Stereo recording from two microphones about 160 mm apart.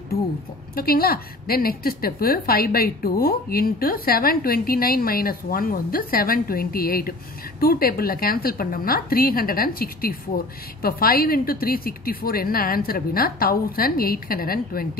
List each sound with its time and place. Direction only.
0.7 s a woman's voice: 70° left (ahead or behind)